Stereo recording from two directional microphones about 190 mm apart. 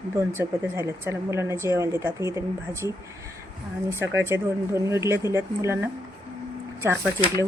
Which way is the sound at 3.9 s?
15° right (ahead or behind).